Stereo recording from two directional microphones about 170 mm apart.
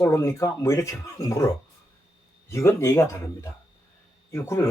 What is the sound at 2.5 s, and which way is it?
Speech, 15° left (ahead or behind).